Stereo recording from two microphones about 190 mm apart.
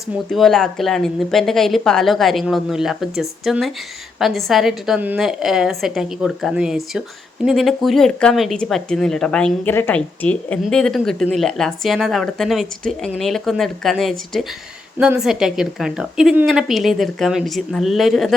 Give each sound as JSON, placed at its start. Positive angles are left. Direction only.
{"t": 0.3, "sound": "speech", "side_deg": 0}